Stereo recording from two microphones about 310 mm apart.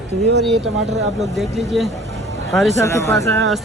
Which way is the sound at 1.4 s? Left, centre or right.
Centre.